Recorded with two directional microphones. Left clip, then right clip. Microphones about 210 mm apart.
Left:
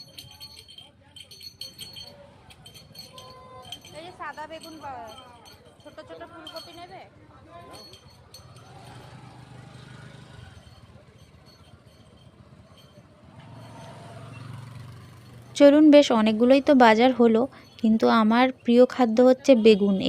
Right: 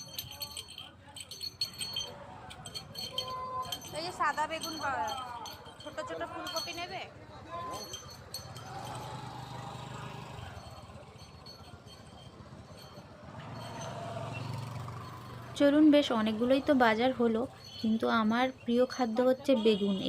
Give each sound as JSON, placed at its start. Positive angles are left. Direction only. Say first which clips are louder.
{"t": 3.9, "sound": "speech", "louder": "right 6 dB", "side_deg": 0}
{"t": 15.5, "sound": "speech", "louder": "left 10 dB", "side_deg": 35}